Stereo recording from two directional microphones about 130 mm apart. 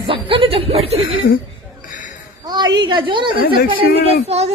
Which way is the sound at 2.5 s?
35° right (ahead or behind).